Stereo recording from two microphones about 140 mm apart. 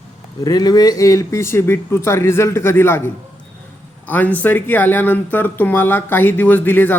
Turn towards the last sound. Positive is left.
turn(degrees=15)  # may be behind; listen again after turning